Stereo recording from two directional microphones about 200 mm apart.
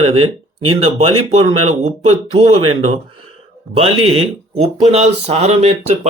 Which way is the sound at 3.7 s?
30° right (ahead or behind).